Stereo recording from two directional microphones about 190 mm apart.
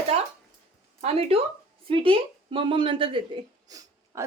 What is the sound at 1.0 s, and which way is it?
Speech, 30° right (ahead or behind).